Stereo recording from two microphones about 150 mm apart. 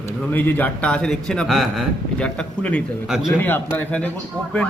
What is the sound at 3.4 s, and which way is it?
Speech, 15° left (ahead or behind).